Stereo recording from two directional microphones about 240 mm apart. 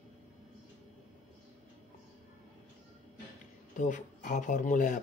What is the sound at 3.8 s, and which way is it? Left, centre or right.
Speech, left.